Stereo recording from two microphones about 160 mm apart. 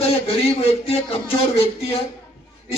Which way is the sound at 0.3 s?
40° left (ahead or behind).